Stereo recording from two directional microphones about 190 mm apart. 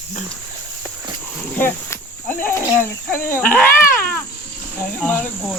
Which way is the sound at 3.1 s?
10° left (ahead or behind).